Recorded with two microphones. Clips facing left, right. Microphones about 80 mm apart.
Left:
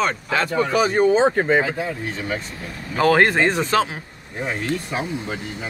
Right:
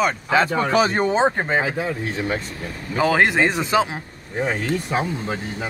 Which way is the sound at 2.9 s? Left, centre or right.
Centre.